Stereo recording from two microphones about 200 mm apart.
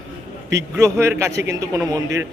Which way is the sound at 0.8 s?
15° right (ahead or behind).